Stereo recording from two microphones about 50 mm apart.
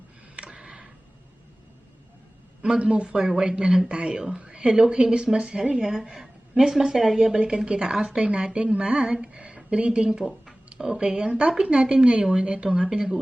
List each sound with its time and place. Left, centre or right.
0.3 s a sound: right
2.6 s a woman's voice: centre
7.3 s speech: centre